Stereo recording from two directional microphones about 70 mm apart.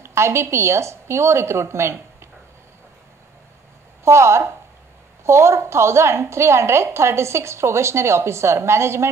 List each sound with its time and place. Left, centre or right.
0.0 s a woman's voice: right
4.0 s a woman's voice: right